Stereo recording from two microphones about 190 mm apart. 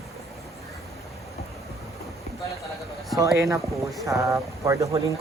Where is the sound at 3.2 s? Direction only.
15° right (ahead or behind).